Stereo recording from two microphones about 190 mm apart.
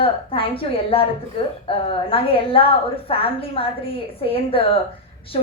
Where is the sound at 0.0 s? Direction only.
30° left (ahead or behind).